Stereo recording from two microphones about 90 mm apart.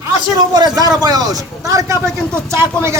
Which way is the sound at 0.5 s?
45° right (ahead or behind).